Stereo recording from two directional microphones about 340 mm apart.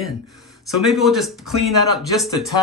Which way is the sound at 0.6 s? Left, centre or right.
Centre.